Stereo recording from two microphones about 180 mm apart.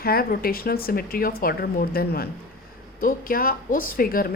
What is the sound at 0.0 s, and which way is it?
A woman's voice, 55° left (ahead or behind).